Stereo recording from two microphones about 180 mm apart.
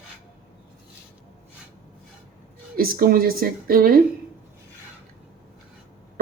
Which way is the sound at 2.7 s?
55° right (ahead or behind).